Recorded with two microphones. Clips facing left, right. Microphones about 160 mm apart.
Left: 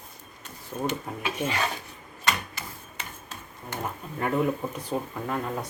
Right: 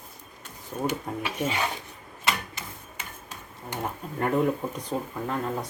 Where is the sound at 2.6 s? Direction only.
20° right (ahead or behind).